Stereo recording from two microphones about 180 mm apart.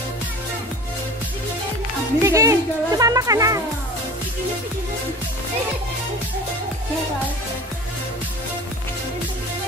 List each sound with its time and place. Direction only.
2.2 s speech: 15° right (ahead or behind)